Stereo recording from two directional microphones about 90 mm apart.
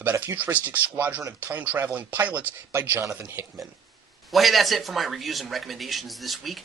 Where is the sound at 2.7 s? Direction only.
30° right (ahead or behind).